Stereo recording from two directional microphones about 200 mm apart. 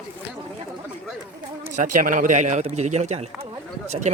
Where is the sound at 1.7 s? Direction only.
40° right (ahead or behind).